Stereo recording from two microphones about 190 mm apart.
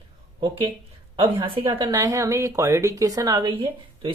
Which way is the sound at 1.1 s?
25° right (ahead or behind).